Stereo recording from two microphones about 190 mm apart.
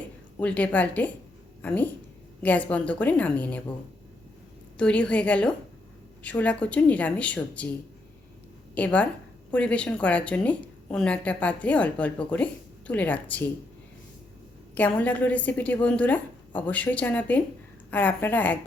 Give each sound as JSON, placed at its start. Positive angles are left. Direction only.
{"t": 0.3, "sound": "a woman's voice", "side_deg": 5}
{"t": 4.8, "sound": "a woman's voice", "side_deg": 5}
{"t": 8.7, "sound": "a woman's voice", "side_deg": 5}
{"t": 14.8, "sound": "a woman's voice", "side_deg": 10}